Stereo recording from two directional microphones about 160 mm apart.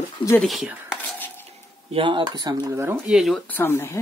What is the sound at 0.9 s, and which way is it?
Whispering, 10° left (ahead or behind).